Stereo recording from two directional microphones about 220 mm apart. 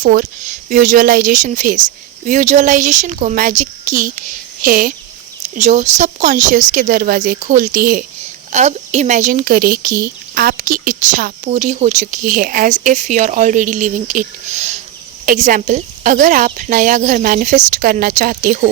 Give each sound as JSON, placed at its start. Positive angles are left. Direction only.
{"t": 0.0, "sound": "speech", "side_deg": -35}